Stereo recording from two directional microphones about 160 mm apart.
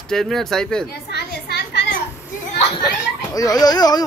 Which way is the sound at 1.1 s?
90° left.